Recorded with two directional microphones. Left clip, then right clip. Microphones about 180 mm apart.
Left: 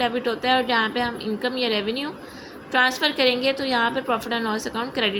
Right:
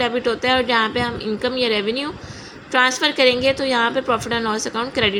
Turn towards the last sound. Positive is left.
turn(degrees=-25)  # may be behind; listen again after turning